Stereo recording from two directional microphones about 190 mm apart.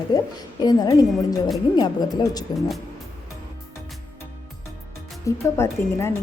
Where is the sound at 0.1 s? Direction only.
20° left (ahead or behind).